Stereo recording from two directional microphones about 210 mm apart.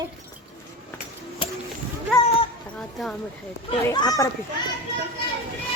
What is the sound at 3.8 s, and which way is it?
Speech, 15° left (ahead or behind).